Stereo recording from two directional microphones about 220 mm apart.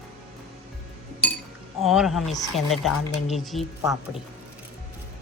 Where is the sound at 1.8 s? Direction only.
Centre (ahead or behind).